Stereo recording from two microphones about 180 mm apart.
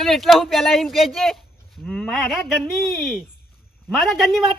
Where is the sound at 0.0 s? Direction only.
Centre (ahead or behind).